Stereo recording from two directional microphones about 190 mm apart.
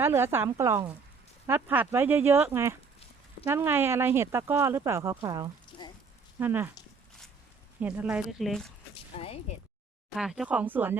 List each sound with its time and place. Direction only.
0.0 s speech: 10° right (ahead or behind)
5.8 s a sound: 25° left (ahead or behind)
6.4 s speech: 10° right (ahead or behind)
7.8 s speech: 10° right (ahead or behind)
9.1 s speech: 30° left (ahead or behind)
10.2 s speech: 5° right (ahead or behind)